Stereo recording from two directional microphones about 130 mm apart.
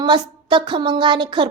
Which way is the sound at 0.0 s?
35° right (ahead or behind).